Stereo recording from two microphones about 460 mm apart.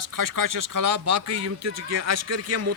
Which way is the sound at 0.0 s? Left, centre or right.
Right.